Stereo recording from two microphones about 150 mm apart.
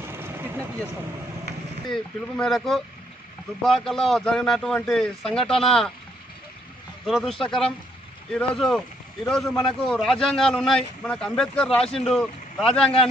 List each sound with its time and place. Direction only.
0.1 s vehicle: 15° right (ahead or behind)
1.9 s a man's voice: centre (ahead or behind)
7.1 s a man's voice: centre (ahead or behind)